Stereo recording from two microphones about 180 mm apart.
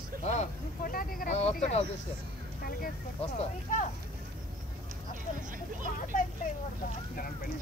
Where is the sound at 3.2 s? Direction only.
40° left (ahead or behind).